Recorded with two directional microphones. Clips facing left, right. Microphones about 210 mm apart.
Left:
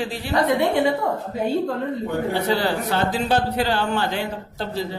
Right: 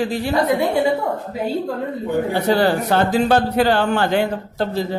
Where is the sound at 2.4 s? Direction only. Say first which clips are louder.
Right 5 dB; 50° right (ahead or behind).